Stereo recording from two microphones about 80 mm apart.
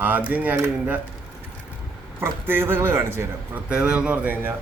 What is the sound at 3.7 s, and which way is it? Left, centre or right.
Speech, centre.